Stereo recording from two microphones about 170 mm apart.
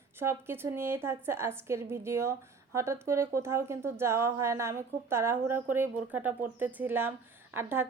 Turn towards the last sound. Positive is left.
turn(degrees=-15)  # may be behind; listen again after turning